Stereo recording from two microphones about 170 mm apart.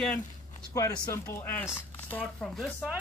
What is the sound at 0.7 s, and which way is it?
Speech, 20° left (ahead or behind).